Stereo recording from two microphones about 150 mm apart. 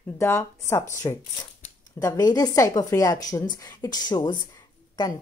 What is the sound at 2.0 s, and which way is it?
A woman's voice, 25° left (ahead or behind).